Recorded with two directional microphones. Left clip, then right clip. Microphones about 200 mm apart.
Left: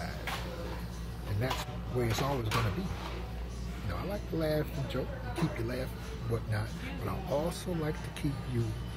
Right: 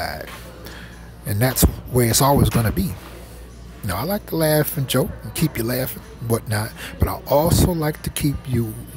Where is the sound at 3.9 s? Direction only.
50° right (ahead or behind).